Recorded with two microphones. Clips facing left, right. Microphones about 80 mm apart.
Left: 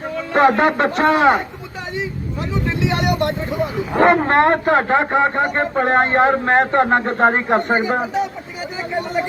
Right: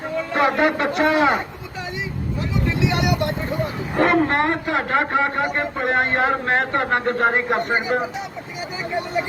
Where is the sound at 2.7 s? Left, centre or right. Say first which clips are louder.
Left 2 dB; left.